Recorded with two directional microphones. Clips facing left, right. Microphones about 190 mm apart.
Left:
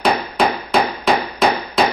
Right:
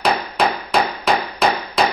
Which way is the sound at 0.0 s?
Centre (ahead or behind).